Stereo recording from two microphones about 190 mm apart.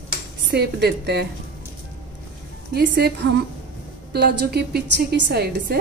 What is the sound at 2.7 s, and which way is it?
Speech, 55° right (ahead or behind).